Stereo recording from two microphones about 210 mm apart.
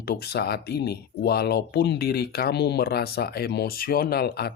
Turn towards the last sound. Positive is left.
turn(degrees=50)  # may be behind; listen again after turning